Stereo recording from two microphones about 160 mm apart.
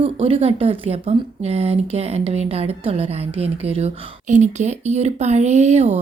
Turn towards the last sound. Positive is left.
turn(degrees=-45)  # may be behind; listen again after turning